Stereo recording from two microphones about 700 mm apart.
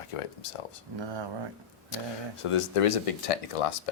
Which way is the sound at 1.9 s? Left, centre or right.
Left.